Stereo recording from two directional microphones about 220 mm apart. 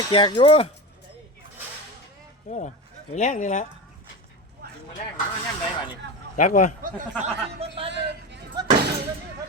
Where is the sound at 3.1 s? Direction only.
35° left (ahead or behind).